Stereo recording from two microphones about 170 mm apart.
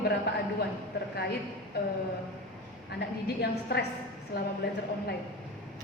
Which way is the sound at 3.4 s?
70° left (ahead or behind).